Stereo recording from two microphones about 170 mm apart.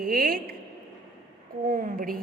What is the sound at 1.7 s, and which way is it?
Speech, 55° right (ahead or behind).